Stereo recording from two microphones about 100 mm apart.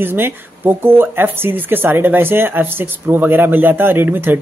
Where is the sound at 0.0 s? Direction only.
20° right (ahead or behind).